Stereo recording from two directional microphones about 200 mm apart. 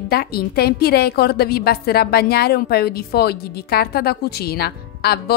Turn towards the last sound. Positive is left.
turn(degrees=50)  # may be behind; listen again after turning